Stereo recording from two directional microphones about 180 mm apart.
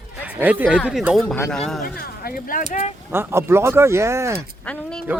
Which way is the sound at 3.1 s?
15° right (ahead or behind).